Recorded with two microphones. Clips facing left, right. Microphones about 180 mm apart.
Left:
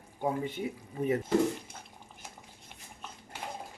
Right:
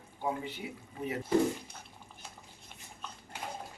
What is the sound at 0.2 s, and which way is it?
Speech, 50° left (ahead or behind).